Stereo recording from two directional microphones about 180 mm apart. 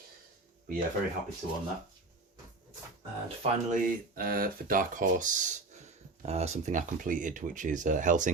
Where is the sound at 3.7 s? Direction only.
55° right (ahead or behind).